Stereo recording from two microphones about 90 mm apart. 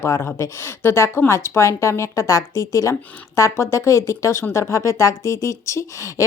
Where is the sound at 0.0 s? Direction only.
30° left (ahead or behind).